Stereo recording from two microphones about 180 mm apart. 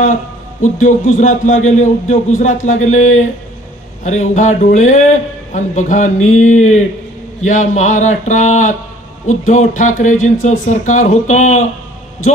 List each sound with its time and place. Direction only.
0.0 s a man's voice: 45° left (ahead or behind)